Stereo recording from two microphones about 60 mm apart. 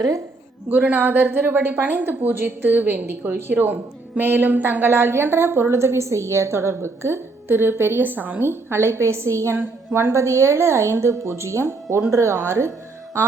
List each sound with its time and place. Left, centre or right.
0.7 s a woman's voice: right